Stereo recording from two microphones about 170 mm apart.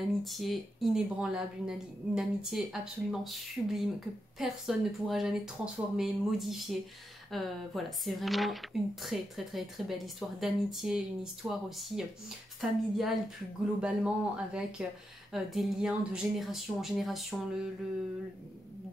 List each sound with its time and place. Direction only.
0.2 s speech: centre (ahead or behind)